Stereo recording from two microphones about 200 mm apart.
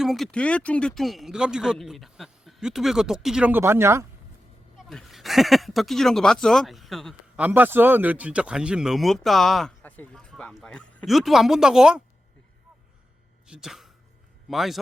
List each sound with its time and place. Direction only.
0.0 s speech: centre (ahead or behind)
4.9 s speech: centre (ahead or behind)
13.5 s speech: 5° right (ahead or behind)